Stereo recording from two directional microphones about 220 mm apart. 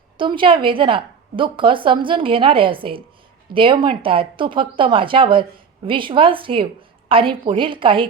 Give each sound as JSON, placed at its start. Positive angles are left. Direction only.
{"t": 0.2, "sound": "speech", "side_deg": -20}